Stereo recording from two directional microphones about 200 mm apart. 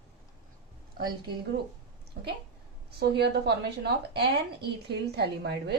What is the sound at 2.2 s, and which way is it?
A woman's voice, 60° right (ahead or behind).